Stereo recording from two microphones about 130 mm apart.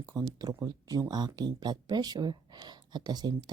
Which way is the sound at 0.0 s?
30° right (ahead or behind).